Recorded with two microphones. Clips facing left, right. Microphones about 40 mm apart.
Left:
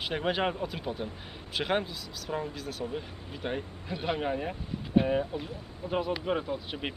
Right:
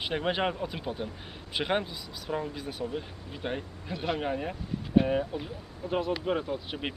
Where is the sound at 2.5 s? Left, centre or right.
Centre.